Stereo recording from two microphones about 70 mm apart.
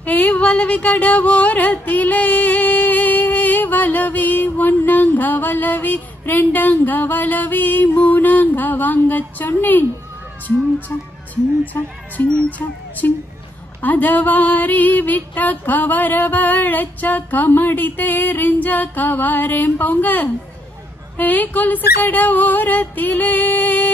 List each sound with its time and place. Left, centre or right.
0.0 s a sound: left
11.6 s speech: left
13.7 s female singing: left